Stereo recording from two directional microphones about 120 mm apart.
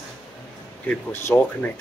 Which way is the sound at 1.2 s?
20° left (ahead or behind).